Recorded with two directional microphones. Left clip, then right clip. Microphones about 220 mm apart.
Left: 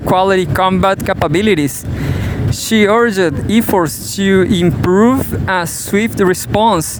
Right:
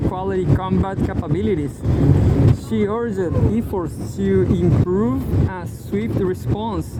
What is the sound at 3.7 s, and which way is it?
Speech, 65° left (ahead or behind).